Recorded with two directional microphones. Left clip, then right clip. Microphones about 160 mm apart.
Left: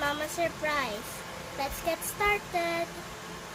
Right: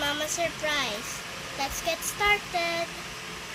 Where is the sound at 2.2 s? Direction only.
30° left (ahead or behind).